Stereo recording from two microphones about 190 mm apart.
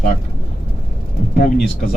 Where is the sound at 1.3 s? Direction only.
55° left (ahead or behind).